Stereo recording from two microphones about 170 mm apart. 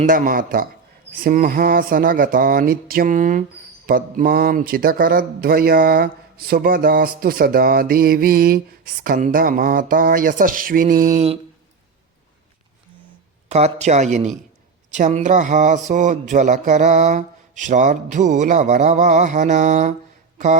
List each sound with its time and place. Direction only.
0.0 s speech: 55° right (ahead or behind)
13.5 s speech: 40° right (ahead or behind)